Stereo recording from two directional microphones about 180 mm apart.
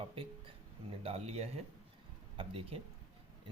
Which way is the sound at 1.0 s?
35° right (ahead or behind).